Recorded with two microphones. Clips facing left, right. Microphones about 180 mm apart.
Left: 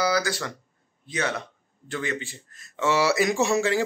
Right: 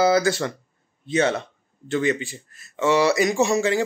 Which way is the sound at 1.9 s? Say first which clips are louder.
Right 8 dB; 20° right (ahead or behind).